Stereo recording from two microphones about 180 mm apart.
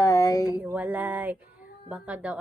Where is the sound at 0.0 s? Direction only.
20° left (ahead or behind).